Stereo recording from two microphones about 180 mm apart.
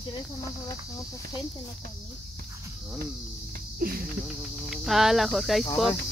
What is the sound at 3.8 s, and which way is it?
Insect, 55° right (ahead or behind).